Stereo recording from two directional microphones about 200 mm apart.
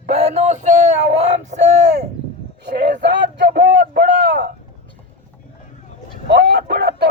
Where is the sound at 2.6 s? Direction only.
60° right (ahead or behind).